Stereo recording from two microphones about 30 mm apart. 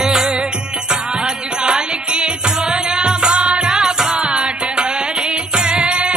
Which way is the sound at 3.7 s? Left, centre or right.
Right.